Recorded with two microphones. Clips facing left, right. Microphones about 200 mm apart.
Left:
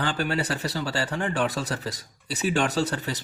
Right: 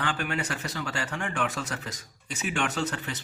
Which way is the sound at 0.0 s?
35° left (ahead or behind).